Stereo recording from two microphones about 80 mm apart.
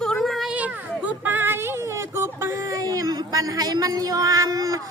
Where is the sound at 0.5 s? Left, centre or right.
Centre.